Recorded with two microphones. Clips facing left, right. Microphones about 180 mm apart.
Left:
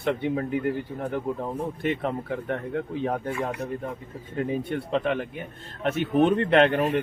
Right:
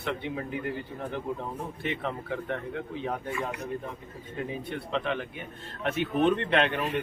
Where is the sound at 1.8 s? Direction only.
45° left (ahead or behind).